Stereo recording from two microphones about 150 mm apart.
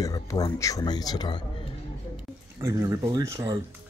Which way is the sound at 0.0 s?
20° left (ahead or behind).